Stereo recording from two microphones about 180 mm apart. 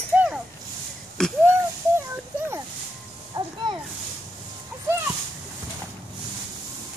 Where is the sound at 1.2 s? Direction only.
5° left (ahead or behind).